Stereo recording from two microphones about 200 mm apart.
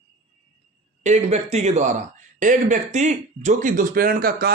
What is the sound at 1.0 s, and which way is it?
Speech, 35° right (ahead or behind).